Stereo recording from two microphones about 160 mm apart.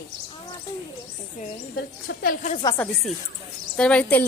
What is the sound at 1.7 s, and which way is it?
Speech, 90° left.